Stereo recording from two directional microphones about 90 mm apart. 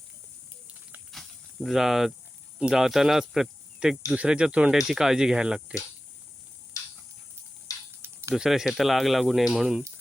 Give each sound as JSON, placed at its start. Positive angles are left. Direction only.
{"t": 1.1, "sound": "cricket", "side_deg": 0}
{"t": 2.6, "sound": "speech", "side_deg": -5}
{"t": 6.8, "sound": "a sound", "side_deg": 40}
{"t": 7.7, "sound": "mechanisms", "side_deg": 40}
{"t": 8.0, "sound": "a sound", "side_deg": -30}
{"t": 8.4, "sound": "speech", "side_deg": -5}